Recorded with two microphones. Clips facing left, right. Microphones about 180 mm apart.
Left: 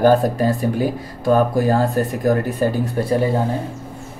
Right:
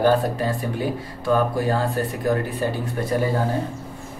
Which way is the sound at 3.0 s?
30° left (ahead or behind).